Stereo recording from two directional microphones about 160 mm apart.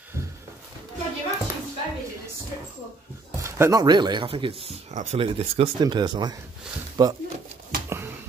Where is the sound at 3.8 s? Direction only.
25° right (ahead or behind).